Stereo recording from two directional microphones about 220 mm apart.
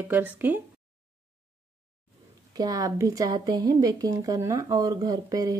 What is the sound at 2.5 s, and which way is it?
A woman's voice, 15° right (ahead or behind).